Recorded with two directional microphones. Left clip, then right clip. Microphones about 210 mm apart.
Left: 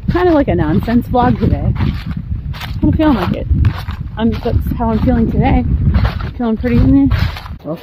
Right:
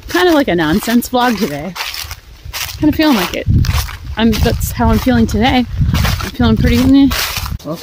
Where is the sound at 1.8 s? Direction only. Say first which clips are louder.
Right 3 dB; 30° right (ahead or behind).